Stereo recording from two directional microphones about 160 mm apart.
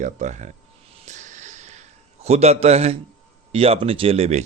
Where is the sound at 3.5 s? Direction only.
35° right (ahead or behind).